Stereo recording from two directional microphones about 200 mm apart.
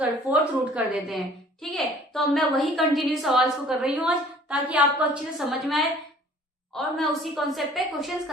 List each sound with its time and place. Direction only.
0.3 s a woman's voice: 5° right (ahead or behind)